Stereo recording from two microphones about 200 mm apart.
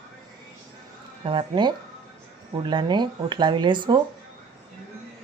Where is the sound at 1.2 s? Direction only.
25° right (ahead or behind).